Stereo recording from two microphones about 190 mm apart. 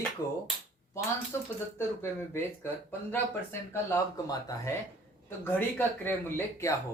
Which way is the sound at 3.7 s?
15° left (ahead or behind).